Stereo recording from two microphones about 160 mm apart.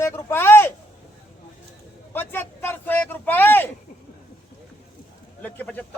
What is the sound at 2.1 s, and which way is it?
A man's voice, 15° left (ahead or behind).